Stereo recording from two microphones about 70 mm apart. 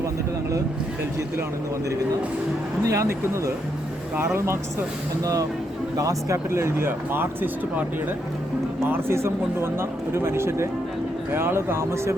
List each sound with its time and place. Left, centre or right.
2.8 s speech: right
5.2 s speech: right